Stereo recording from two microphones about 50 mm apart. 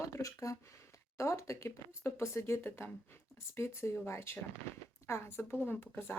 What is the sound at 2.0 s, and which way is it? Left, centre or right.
Speech, left.